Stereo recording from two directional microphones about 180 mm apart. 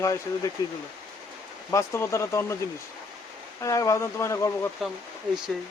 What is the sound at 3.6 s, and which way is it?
Speech, 20° left (ahead or behind).